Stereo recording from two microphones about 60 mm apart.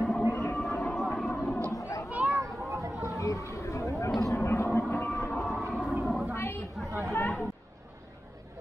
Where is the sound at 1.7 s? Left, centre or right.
Left.